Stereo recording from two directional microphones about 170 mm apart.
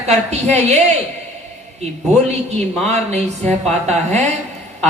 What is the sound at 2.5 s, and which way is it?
A woman's voice, 40° right (ahead or behind).